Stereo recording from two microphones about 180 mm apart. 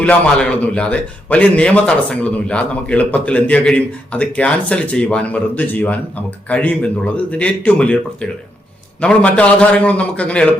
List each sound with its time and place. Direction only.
0.0 s a man's voice: 5° left (ahead or behind)